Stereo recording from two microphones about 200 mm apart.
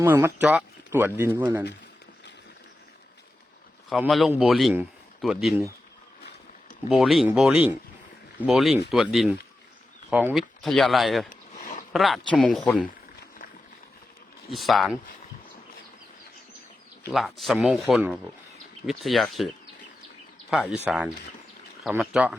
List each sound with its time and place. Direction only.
0.0 s speech: 15° right (ahead or behind)
3.8 s a man's voice: centre (ahead or behind)
6.9 s speech: centre (ahead or behind)
11.3 s a sound: 40° left (ahead or behind)
11.9 s speech: centre (ahead or behind)
14.5 s speech: centre (ahead or behind)
17.1 s speech: centre (ahead or behind)
20.5 s speech: 5° right (ahead or behind)